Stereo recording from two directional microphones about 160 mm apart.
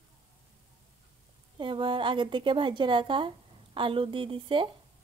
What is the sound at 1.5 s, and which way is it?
A woman's voice, 30° right (ahead or behind).